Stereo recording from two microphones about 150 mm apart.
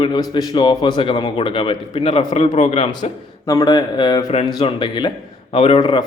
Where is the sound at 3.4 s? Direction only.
25° left (ahead or behind).